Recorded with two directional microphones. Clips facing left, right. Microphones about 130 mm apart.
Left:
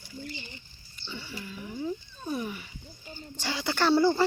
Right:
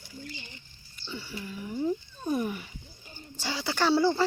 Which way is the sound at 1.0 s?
10° right (ahead or behind).